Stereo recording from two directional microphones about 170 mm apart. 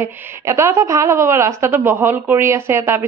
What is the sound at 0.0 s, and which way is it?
A woman's voice, 15° right (ahead or behind).